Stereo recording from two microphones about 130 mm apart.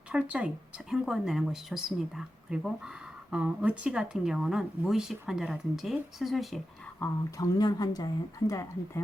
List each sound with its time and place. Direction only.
0.1 s speech: 10° right (ahead or behind)
7.0 s a woman's voice: 25° left (ahead or behind)